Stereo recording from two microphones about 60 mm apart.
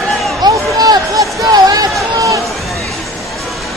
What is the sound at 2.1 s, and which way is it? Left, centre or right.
Run, right.